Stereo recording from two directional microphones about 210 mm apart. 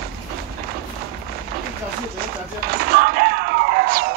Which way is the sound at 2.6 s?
45° right (ahead or behind).